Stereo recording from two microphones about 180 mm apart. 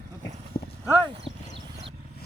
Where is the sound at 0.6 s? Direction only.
30° left (ahead or behind).